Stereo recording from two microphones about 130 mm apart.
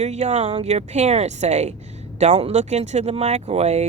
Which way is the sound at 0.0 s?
60° right (ahead or behind).